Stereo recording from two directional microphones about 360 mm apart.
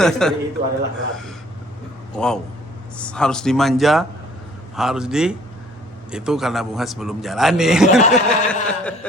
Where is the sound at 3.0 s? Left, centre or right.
Centre.